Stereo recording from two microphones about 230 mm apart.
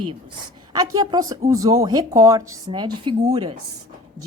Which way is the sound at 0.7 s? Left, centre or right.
Centre.